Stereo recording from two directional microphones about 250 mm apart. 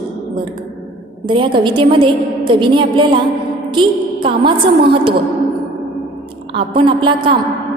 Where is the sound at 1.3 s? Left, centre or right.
Centre.